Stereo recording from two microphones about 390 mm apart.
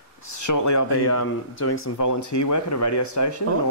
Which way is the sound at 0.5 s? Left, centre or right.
Left.